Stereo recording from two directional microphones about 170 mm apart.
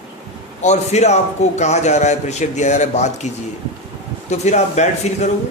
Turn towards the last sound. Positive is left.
turn(degrees=45)  # may be behind; listen again after turning